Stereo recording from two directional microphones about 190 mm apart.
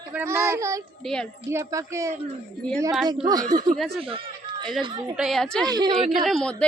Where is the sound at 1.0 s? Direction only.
5° left (ahead or behind).